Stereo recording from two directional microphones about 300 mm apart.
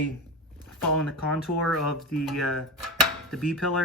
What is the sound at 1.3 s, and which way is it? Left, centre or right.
Speech, centre.